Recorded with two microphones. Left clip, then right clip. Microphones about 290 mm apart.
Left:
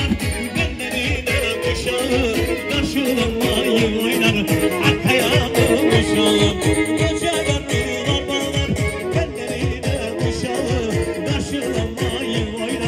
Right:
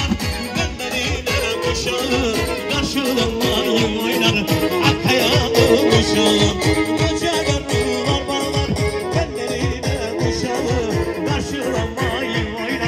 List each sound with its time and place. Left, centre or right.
2.0 s music: centre
3.4 s music: right